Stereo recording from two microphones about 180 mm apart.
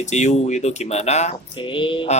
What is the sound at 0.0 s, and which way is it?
Speech, 40° left (ahead or behind).